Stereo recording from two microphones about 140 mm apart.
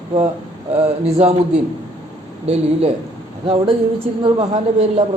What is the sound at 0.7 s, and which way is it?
Speech, 45° right (ahead or behind).